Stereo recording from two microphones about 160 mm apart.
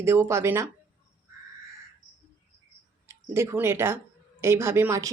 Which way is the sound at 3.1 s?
15° right (ahead or behind).